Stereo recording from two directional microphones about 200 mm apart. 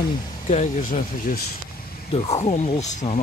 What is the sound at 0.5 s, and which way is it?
Speech, 35° left (ahead or behind).